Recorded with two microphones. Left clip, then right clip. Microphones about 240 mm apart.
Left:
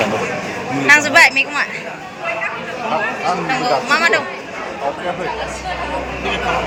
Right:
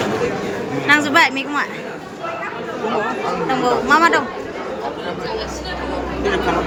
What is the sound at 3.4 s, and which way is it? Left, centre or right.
Speech, centre.